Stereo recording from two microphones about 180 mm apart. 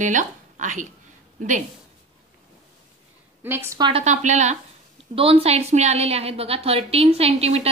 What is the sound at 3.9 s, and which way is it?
A woman's voice, 40° right (ahead or behind).